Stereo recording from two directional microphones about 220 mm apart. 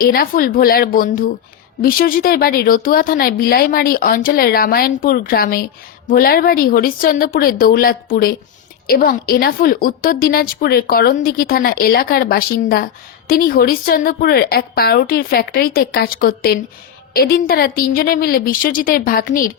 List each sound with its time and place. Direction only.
0.0 s a woman's voice: 40° left (ahead or behind)